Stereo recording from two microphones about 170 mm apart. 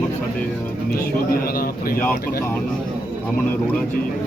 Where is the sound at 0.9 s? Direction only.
60° left (ahead or behind).